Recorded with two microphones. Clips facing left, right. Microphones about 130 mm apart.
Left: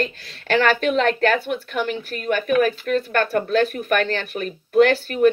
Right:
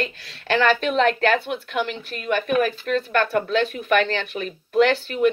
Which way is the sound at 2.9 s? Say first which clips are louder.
Right 1 dB; 45° left (ahead or behind).